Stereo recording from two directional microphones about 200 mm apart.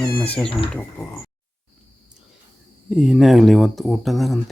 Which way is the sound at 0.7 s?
5° left (ahead or behind).